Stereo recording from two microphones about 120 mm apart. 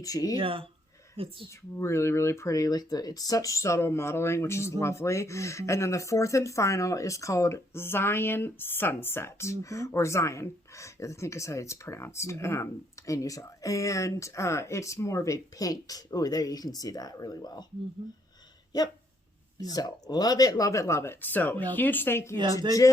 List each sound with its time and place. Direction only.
0.0 s speech: 30° left (ahead or behind)
0.3 s speech: 50° right (ahead or behind)
1.8 s speech: 20° left (ahead or behind)
18.7 s speech: 35° left (ahead or behind)